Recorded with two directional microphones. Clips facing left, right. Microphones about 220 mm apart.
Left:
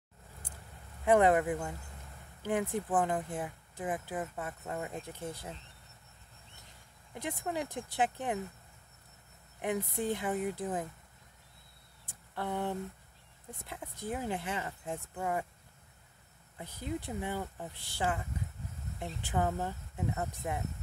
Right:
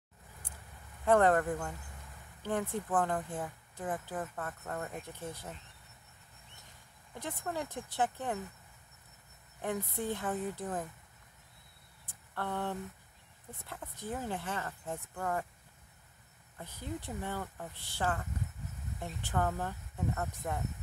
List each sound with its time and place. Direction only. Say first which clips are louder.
1.0 s speech: left 1 dB; 15° left (ahead or behind)
7.2 s speech: left 2 dB; 15° left (ahead or behind)
9.6 s speech: left 2 dB; 15° left (ahead or behind)
12.4 s speech: left 2 dB; 15° left (ahead or behind)
16.5 s speech: left 3 dB; 15° left (ahead or behind)
19.3 s speech: left 1 dB; 15° left (ahead or behind)